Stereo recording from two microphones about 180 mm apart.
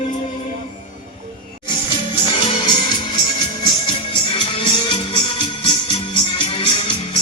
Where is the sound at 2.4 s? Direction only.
25° left (ahead or behind).